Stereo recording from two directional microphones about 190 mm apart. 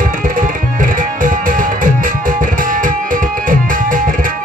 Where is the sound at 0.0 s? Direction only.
45° right (ahead or behind).